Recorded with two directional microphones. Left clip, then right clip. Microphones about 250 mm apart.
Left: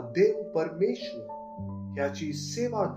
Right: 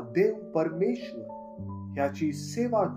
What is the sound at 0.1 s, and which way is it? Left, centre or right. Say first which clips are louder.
Speech: left 1 dB; right.